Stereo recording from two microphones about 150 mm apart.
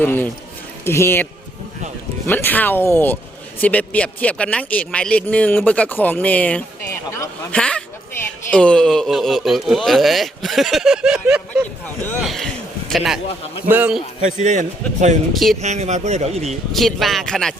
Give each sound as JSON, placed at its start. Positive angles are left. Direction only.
{"t": 0.0, "sound": "a man's voice", "side_deg": 10}
{"t": 7.5, "sound": "a man's voice", "side_deg": 5}
{"t": 13.7, "sound": "a man's voice", "side_deg": -10}
{"t": 14.3, "sound": "a man's voice", "side_deg": -55}
{"t": 15.3, "sound": "speech", "side_deg": 0}
{"t": 15.6, "sound": "a man's voice", "side_deg": -50}
{"t": 16.7, "sound": "speech", "side_deg": 0}